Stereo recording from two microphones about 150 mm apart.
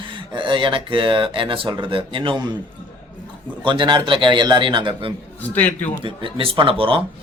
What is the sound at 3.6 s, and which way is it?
Speech, 30° right (ahead or behind).